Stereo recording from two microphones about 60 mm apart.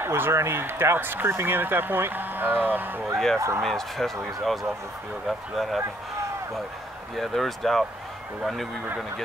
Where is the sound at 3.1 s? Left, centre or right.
Centre.